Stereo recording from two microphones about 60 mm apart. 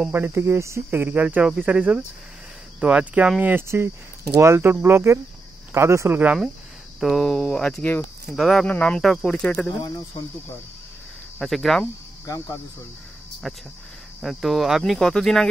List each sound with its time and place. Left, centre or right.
0.1 s cricket: right
1.2 s speech: centre
3.6 s cricket: right
4.6 s cricket: right
7.0 s speech: centre
7.5 s speech: centre
8.4 s speech: centre
8.6 s speech: centre
11.3 s speech: centre
13.4 s speech: centre